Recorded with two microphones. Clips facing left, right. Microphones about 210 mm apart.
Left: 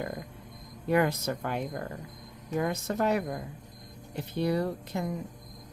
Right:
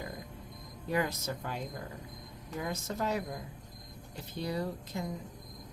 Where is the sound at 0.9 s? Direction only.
65° left (ahead or behind).